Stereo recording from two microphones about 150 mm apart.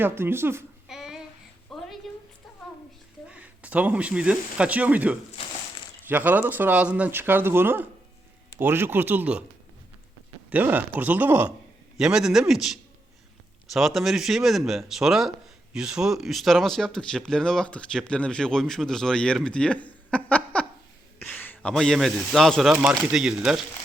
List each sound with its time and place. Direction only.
0.0 s speech: 15° right (ahead or behind)
0.9 s child singing: 5° right (ahead or behind)
1.7 s a sound: centre (ahead or behind)
3.2 s speech: 10° right (ahead or behind)
10.5 s speech: 10° right (ahead or behind)